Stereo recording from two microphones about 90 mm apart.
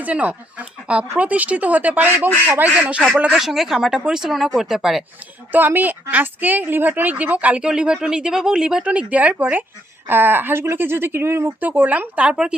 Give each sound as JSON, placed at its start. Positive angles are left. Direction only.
{"t": 0.0, "sound": "a woman's voice", "side_deg": -15}
{"t": 5.5, "sound": "a woman's voice", "side_deg": -20}